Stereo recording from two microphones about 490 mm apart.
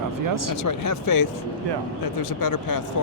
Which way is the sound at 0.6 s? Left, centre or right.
Left.